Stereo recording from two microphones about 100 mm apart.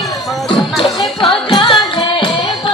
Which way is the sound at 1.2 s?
55° left (ahead or behind).